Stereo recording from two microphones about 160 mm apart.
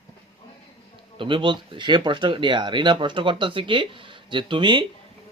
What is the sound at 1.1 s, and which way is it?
Speech, 30° right (ahead or behind).